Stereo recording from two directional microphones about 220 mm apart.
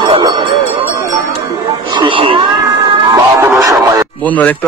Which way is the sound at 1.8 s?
20° right (ahead or behind).